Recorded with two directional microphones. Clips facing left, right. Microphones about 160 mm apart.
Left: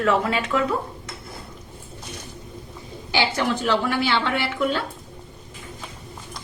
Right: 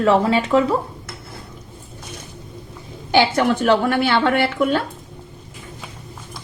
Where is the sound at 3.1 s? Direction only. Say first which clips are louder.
Right 7 dB; 55° right (ahead or behind).